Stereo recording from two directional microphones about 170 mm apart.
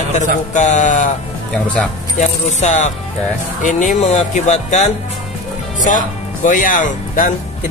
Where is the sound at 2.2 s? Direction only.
45° left (ahead or behind).